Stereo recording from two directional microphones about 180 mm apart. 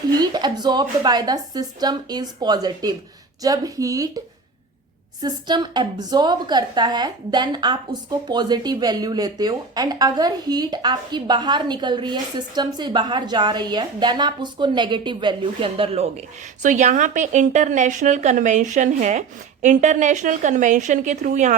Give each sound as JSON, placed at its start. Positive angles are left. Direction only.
{"t": 0.2, "sound": "speech", "side_deg": -25}
{"t": 5.2, "sound": "speech", "side_deg": -25}
{"t": 16.6, "sound": "a woman's voice", "side_deg": -45}